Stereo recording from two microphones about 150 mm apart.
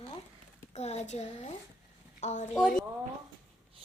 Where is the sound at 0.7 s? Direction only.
50° left (ahead or behind).